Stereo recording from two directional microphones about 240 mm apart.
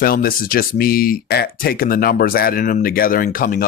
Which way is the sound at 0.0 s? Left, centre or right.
Left.